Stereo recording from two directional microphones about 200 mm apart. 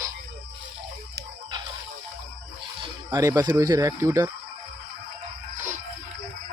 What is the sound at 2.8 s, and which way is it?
Speech, 20° right (ahead or behind).